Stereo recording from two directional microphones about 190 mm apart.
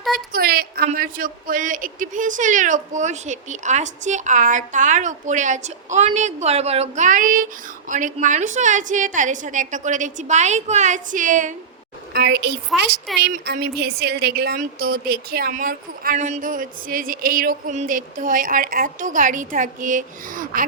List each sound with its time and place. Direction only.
0.3 s a sound: 50° right (ahead or behind)
0.9 s a woman's voice: 45° right (ahead or behind)
12.1 s a woman's voice: 60° right (ahead or behind)
13.1 s speech: centre (ahead or behind)
13.4 s a woman's voice: 60° right (ahead or behind)